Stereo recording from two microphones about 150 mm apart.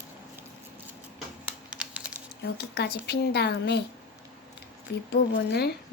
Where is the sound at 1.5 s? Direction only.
5° right (ahead or behind).